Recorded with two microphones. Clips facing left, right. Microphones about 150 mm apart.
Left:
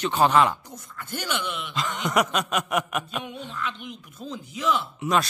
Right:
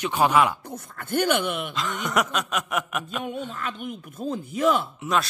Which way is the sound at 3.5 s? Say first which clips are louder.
Right 2 dB; 45° right (ahead or behind).